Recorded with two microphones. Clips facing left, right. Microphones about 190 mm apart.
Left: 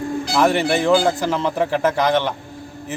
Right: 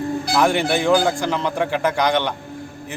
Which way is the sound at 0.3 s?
Centre (ahead or behind).